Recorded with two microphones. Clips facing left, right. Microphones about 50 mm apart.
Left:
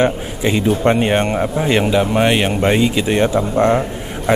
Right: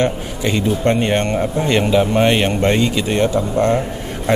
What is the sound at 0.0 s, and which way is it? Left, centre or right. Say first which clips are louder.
Speech: left 2 dB; centre.